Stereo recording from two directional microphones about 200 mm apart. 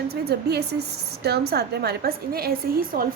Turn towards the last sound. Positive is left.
turn(degrees=-45)  # may be behind; listen again after turning